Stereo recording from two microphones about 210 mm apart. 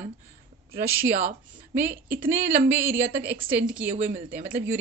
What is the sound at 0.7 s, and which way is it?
Speech, 45° right (ahead or behind).